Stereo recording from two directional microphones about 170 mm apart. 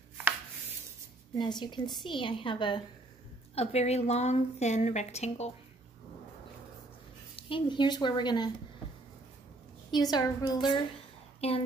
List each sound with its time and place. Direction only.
1.4 s a woman's voice: 25° left (ahead or behind)
7.3 s a woman's voice: 30° left (ahead or behind)
9.8 s a woman's voice: 25° left (ahead or behind)
11.4 s a woman's voice: 35° left (ahead or behind)